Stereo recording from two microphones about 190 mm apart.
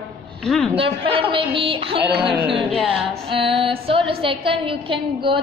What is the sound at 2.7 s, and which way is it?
Music, centre (ahead or behind).